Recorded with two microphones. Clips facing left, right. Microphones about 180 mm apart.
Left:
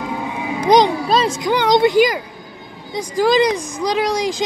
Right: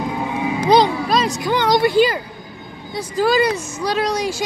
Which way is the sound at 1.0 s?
30° left (ahead or behind).